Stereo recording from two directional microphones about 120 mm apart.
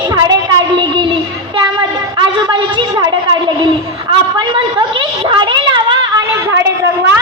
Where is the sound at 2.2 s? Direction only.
40° right (ahead or behind).